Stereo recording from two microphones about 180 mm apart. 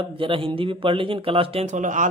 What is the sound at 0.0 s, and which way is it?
Speech, 30° right (ahead or behind).